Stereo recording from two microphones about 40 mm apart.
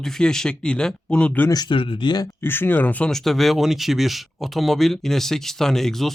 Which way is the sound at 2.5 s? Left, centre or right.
Left.